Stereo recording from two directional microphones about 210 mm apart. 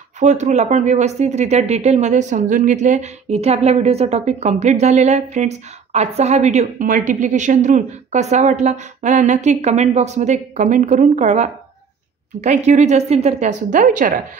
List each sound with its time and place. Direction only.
0.2 s speech: 35° right (ahead or behind)